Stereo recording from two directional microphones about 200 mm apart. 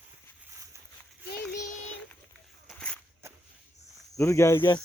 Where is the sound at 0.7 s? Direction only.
15° right (ahead or behind).